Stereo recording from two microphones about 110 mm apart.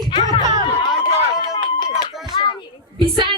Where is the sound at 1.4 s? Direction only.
45° left (ahead or behind).